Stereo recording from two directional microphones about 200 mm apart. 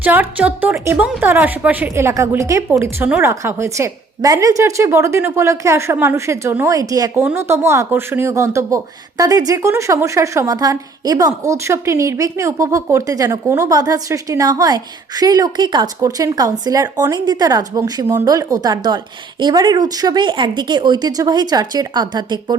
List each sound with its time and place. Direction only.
0.0 s a woman's voice: 10° right (ahead or behind)